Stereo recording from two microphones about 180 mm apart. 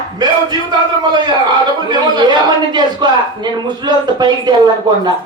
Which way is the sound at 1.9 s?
25° right (ahead or behind).